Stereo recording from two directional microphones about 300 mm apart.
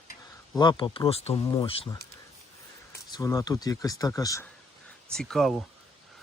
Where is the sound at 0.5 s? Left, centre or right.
Centre.